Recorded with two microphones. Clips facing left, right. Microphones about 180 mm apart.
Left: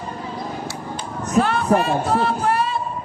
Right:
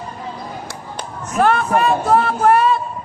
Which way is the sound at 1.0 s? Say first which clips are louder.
Even; 55° right (ahead or behind).